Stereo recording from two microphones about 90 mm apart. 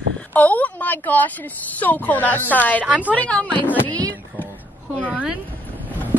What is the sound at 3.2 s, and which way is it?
Speech, 15° left (ahead or behind).